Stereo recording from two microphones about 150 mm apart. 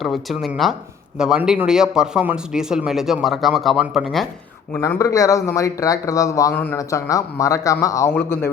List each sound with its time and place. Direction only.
0.0 s speech: centre (ahead or behind)
4.7 s speech: 20° left (ahead or behind)
6.5 s a man's voice: 10° left (ahead or behind)
6.7 s speech: 25° left (ahead or behind)